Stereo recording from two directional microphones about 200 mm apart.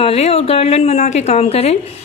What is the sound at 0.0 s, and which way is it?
A woman's voice, 30° left (ahead or behind).